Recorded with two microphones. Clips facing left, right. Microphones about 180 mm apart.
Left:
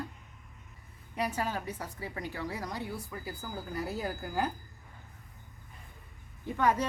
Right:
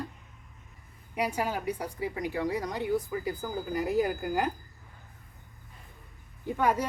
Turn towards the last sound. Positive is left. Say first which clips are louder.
# right 1 dB
turn(degrees=-10)  # may be behind; listen again after turning